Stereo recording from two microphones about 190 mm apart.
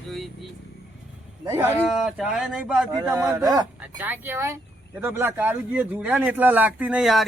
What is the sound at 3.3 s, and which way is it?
Speech, 20° right (ahead or behind).